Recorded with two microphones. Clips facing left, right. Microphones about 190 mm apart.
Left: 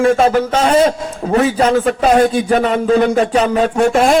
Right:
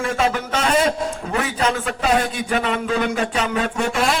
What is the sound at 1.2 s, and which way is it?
A man's voice, 40° left (ahead or behind).